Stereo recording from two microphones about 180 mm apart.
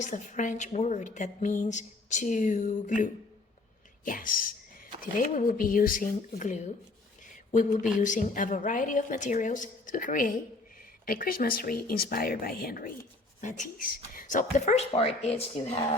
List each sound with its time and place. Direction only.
0.0 s a woman's voice: 45° left (ahead or behind)
13.4 s speech: 45° left (ahead or behind)